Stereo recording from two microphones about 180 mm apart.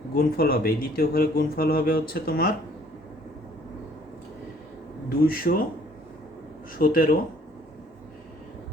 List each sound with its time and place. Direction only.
0.1 s speech: 55° left (ahead or behind)
5.0 s speech: 55° left (ahead or behind)
6.7 s speech: 50° left (ahead or behind)